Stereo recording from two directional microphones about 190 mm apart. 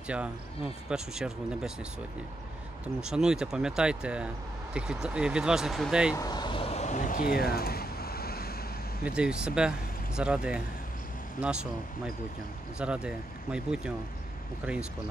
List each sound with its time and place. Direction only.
0.1 s speech: 5° right (ahead or behind)
3.0 s speech: 5° right (ahead or behind)
6.1 s vehicle: 20° left (ahead or behind); by 8.5 s 55° left (ahead or behind)
9.0 s speech: 5° right (ahead or behind)
12.7 s speech: 5° right (ahead or behind)